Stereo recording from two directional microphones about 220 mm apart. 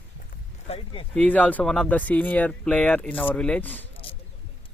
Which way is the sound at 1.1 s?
5° left (ahead or behind).